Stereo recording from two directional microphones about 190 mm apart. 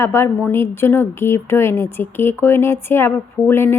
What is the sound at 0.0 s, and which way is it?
Speech, 15° left (ahead or behind).